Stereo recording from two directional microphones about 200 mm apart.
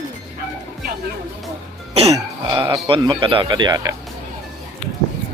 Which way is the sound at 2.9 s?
25° right (ahead or behind).